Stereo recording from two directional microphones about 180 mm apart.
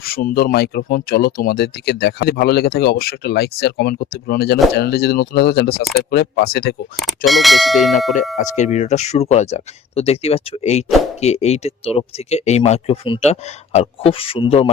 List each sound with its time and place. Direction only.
0.0 s speech: 55° left (ahead or behind)
7.3 s speech: centre (ahead or behind)
8.4 s speech: 40° left (ahead or behind)